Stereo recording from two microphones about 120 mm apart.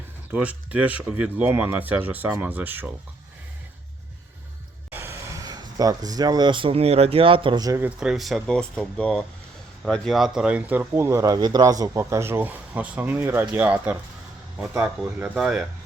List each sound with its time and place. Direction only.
0.3 s speech: 10° right (ahead or behind)
4.9 s music: 20° right (ahead or behind)
5.4 s speech: 30° right (ahead or behind); by 7.6 s 45° right (ahead or behind)
7.8 s speech: 10° right (ahead or behind)
15.4 s speech: centre (ahead or behind)